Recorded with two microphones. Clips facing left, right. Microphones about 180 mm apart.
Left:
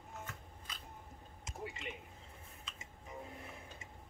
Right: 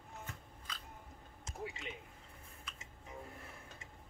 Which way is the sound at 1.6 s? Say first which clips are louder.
Even; centre (ahead or behind).